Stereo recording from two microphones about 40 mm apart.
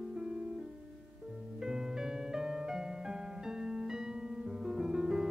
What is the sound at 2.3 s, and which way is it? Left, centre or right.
Piano, centre.